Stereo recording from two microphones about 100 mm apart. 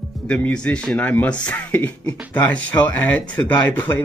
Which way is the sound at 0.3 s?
10° left (ahead or behind).